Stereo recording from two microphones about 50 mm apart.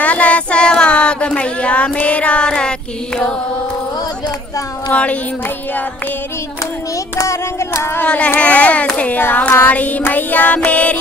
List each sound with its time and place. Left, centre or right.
0.0 s child singing: left
4.9 s speech: left
7.2 s music: left
8.4 s speech: left
9.1 s child singing: left